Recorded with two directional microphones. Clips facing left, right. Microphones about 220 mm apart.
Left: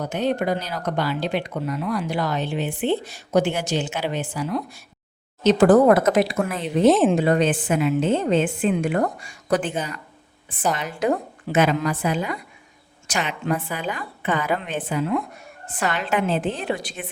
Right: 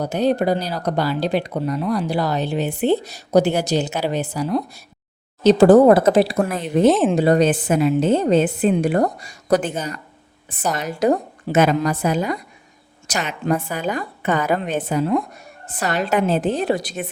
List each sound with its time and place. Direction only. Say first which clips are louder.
0.0 s speech: right 4 dB; 35° right (ahead or behind)
6.8 s speech: even; centre (ahead or behind)
7.2 s speech: right 4 dB; 40° right (ahead or behind)